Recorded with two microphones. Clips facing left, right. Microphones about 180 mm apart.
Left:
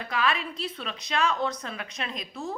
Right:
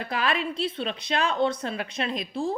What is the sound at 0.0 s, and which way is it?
A woman's voice, 35° right (ahead or behind).